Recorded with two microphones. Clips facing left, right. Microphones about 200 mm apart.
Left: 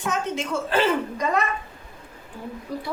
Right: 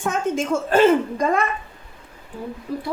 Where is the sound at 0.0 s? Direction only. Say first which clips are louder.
Right 4 dB; 50° right (ahead or behind).